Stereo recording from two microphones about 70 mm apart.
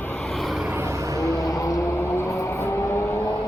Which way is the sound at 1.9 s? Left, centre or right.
Left.